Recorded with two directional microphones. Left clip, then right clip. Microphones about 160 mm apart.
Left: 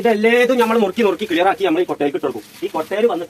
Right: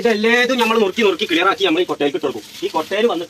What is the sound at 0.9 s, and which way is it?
Speech, 75° left (ahead or behind).